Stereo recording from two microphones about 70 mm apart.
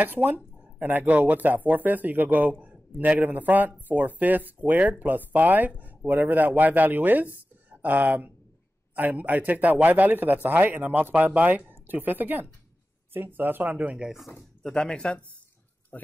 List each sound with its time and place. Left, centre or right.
0.0 s speech: right
14.6 s speech: centre